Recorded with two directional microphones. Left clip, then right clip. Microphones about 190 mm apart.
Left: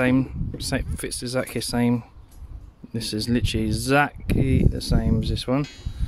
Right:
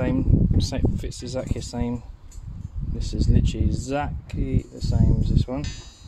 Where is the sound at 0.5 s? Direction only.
35° left (ahead or behind); by 5.6 s 60° left (ahead or behind).